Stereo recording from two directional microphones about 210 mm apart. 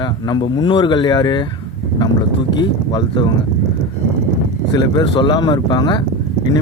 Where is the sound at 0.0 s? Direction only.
20° left (ahead or behind).